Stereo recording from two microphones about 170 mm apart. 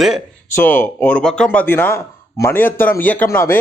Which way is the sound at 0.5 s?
10° left (ahead or behind).